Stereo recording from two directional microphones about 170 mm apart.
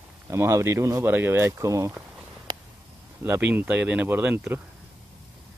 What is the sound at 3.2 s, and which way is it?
Speech, 10° right (ahead or behind).